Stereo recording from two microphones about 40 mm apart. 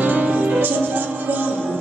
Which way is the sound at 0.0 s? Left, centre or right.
Right.